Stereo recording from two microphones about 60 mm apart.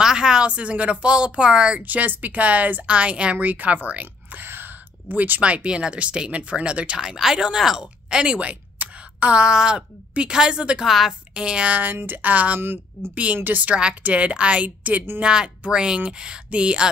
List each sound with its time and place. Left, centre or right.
0.0 s a woman's voice: centre
1.9 s speech: right
5.4 s speech: centre
10.9 s a woman's voice: centre
11.3 s a woman's voice: centre
11.9 s a woman's voice: right
12.5 s a woman's voice: right
13.7 s a woman's voice: centre
15.2 s a woman's voice: centre